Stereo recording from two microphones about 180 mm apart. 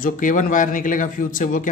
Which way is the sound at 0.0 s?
45° left (ahead or behind).